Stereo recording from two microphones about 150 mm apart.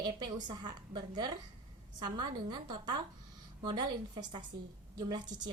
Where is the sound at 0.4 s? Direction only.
30° right (ahead or behind).